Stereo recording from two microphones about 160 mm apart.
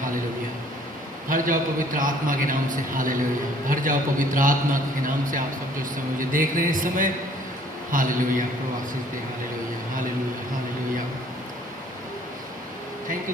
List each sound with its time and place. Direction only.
1.3 s a man's voice: 55° right (ahead or behind)